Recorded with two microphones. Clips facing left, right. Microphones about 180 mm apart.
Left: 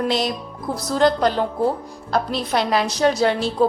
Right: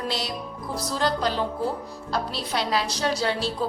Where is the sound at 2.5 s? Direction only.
55° left (ahead or behind).